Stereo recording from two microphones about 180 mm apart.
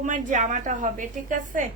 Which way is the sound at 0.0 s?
45° right (ahead or behind).